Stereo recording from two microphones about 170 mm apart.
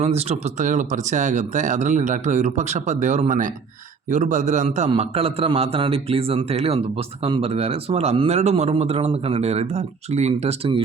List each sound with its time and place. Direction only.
0.0 s a man's voice: 40° right (ahead or behind)